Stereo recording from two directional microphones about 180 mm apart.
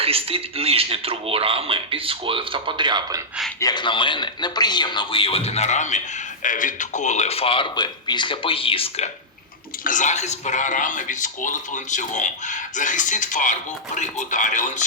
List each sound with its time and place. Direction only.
0.0 s speech: 30° right (ahead or behind)
3.6 s a man's voice: 25° left (ahead or behind)
9.8 s a man's voice: 45° left (ahead or behind)